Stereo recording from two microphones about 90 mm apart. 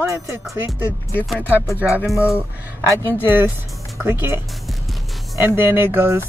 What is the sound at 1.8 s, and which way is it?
Speech, centre (ahead or behind).